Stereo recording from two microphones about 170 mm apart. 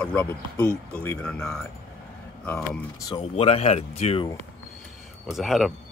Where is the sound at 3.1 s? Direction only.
35° left (ahead or behind).